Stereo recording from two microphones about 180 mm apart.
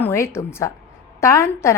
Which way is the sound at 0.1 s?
15° left (ahead or behind).